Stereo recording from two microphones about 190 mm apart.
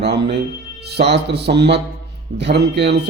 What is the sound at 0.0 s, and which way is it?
Speech, 60° right (ahead or behind).